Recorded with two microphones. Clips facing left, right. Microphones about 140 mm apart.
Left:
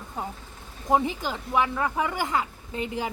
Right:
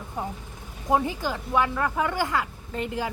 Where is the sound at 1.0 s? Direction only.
15° left (ahead or behind).